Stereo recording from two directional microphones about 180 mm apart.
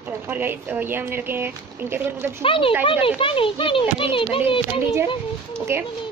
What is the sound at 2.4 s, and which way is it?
A child's voice, 30° left (ahead or behind).